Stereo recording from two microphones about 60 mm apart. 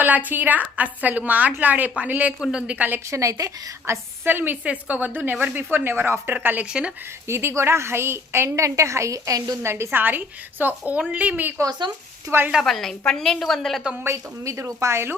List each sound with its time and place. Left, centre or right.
0.0 s a woman's voice: right
2.4 s a woman's voice: centre
2.7 s a woman's voice: right
3.1 s a woman's voice: right
4.2 s a woman's voice: right
4.6 s a woman's voice: right
6.7 s a woman's voice: centre
7.3 s a woman's voice: right
9.6 s a woman's voice: right
9.9 s a woman's voice: right
12.3 s a woman's voice: right
12.6 s a woman's voice: centre
14.0 s a woman's voice: right